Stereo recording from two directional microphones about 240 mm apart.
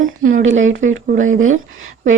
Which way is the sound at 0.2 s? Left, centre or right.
Right.